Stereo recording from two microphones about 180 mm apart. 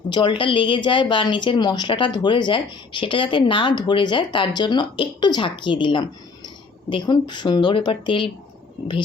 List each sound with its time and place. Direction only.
0.1 s a woman's voice: 25° left (ahead or behind)